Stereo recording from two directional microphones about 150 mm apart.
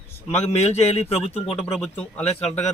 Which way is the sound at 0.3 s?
45° left (ahead or behind).